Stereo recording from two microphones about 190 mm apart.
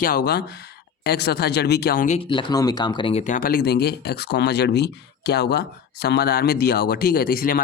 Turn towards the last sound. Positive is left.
turn(degrees=50)  # may be behind; listen again after turning